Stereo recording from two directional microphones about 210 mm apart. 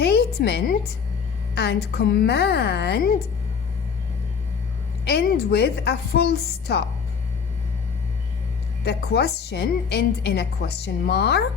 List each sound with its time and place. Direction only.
0.0 s a sound: 50° left (ahead or behind)
1.5 s a woman's voice: 50° left (ahead or behind)
5.0 s a woman's voice: 50° left (ahead or behind)
8.8 s a woman's voice: 50° left (ahead or behind)